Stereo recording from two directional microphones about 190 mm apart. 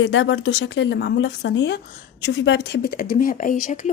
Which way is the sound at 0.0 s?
90° left.